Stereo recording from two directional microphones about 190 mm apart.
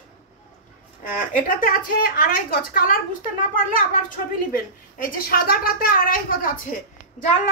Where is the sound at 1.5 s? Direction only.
50° left (ahead or behind).